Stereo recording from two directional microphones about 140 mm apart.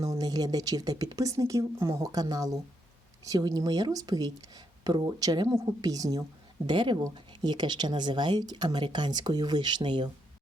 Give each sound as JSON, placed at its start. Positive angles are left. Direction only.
{"t": 0.0, "sound": "speech", "side_deg": -25}